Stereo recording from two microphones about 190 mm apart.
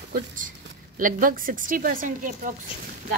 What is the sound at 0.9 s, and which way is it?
A woman's voice, 45° right (ahead or behind).